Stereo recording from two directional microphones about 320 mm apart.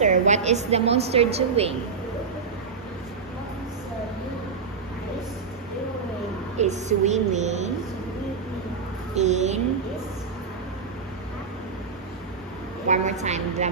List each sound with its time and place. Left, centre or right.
0.0 s a woman's voice: right
6.6 s a woman's voice: right
9.1 s a woman's voice: right
12.9 s a woman's voice: right